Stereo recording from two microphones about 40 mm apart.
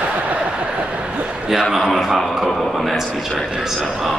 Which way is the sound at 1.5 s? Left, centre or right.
Centre.